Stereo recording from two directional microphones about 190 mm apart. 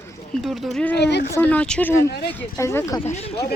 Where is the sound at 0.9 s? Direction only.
60° left (ahead or behind).